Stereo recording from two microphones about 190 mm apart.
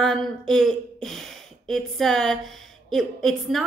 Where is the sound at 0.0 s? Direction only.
5° left (ahead or behind).